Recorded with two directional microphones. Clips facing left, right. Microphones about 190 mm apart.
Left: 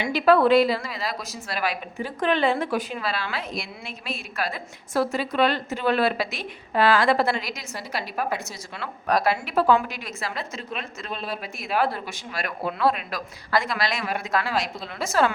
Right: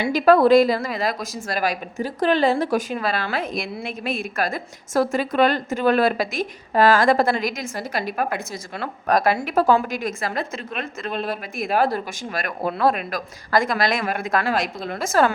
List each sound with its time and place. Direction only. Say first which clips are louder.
0.0 s a woman's voice: right 3 dB; 45° right (ahead or behind)